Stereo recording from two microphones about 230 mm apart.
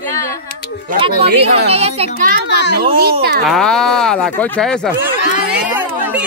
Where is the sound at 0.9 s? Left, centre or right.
Right.